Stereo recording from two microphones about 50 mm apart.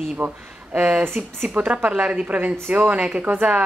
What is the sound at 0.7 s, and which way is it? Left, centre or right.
Speech, right.